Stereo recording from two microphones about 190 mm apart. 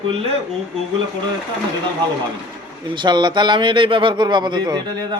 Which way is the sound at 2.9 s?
25° right (ahead or behind).